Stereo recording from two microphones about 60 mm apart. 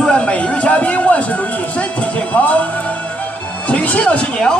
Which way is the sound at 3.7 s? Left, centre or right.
Left.